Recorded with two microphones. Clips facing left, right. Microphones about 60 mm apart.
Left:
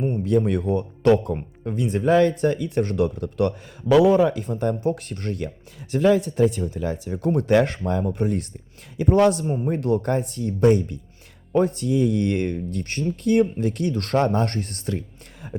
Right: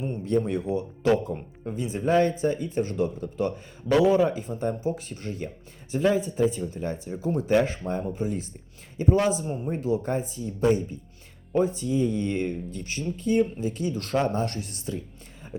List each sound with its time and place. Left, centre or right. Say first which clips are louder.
0.3 s speech: left 3 dB; left
11.5 s speech: left 4 dB; left